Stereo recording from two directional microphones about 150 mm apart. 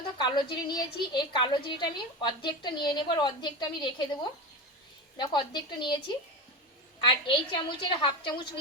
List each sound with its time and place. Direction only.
0.2 s a woman's voice: 30° left (ahead or behind)
7.0 s a woman's voice: 35° left (ahead or behind)